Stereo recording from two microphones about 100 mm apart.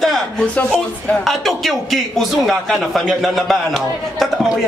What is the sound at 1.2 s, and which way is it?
A man's voice, centre (ahead or behind).